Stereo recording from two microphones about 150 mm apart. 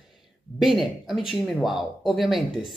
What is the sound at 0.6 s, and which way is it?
Speech, centre (ahead or behind).